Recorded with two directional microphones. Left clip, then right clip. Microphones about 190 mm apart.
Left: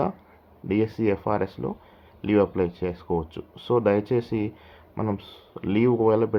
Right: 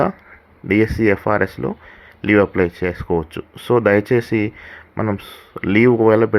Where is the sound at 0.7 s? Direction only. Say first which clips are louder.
Right 8 dB; 25° right (ahead or behind).